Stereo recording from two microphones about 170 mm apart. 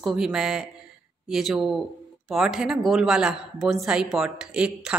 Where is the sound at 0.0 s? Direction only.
5° right (ahead or behind).